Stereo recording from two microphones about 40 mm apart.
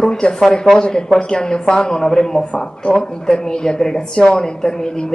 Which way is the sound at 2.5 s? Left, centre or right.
Left.